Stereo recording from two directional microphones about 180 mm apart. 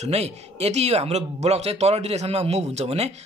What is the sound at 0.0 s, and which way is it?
Speech, 35° right (ahead or behind).